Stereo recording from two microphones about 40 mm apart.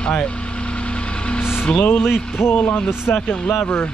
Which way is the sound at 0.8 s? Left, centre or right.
Left.